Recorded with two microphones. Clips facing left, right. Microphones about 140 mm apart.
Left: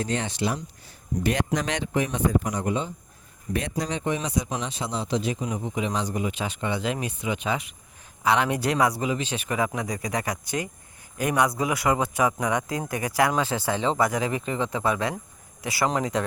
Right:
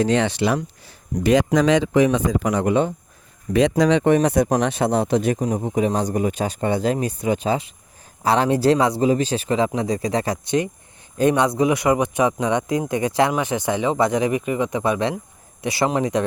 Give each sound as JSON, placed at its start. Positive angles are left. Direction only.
{"t": 0.0, "sound": "speech", "side_deg": -90}
{"t": 1.2, "sound": "speech", "side_deg": -90}
{"t": 3.5, "sound": "speech", "side_deg": -90}
{"t": 5.5, "sound": "a man's voice", "side_deg": -45}